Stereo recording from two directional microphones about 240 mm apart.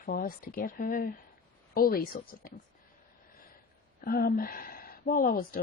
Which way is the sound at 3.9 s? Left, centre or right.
Left.